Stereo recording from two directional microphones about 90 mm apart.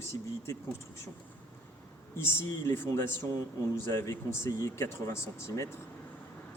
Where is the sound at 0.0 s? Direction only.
35° left (ahead or behind).